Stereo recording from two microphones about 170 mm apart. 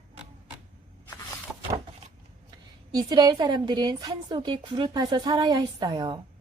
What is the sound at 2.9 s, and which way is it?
Speech, 20° right (ahead or behind).